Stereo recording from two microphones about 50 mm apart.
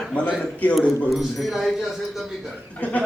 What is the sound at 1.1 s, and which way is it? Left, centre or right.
Speech, centre.